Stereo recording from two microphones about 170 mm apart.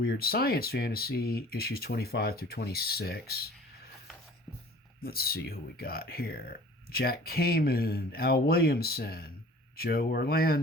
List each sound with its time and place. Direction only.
0.0 s speech: 65° left (ahead or behind)
5.0 s speech: 65° left (ahead or behind)